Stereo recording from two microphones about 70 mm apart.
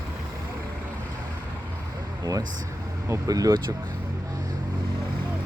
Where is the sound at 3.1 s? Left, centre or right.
Right.